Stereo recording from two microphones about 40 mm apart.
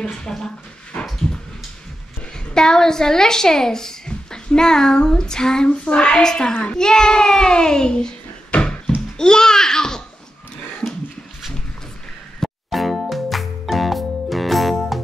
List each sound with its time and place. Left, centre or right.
0.3 s speech: centre
2.5 s speech: centre
5.7 s a child's voice: left
8.5 s a sound: left
9.2 s a child's voice: centre
12.4 s music: centre